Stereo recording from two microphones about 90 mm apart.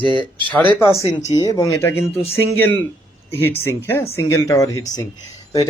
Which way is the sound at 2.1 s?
90° left.